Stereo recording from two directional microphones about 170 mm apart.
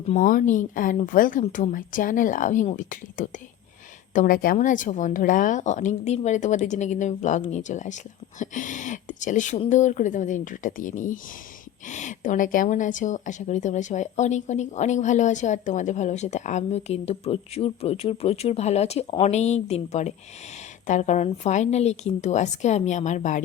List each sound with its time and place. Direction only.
0.1 s a woman's voice: 50° left (ahead or behind)